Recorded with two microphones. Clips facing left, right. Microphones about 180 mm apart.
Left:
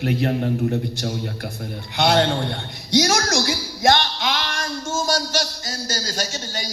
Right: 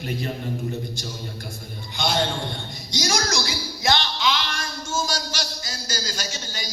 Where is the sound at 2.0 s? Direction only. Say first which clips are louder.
Left 6 dB; 60° left (ahead or behind).